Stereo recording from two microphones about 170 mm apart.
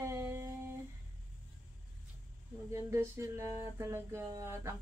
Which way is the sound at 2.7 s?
15° right (ahead or behind).